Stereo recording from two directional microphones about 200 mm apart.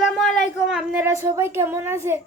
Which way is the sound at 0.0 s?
Centre (ahead or behind).